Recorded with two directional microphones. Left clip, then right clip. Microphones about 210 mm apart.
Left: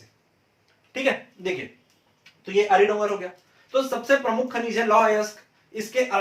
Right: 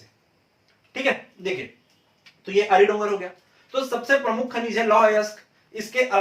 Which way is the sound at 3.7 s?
10° left (ahead or behind).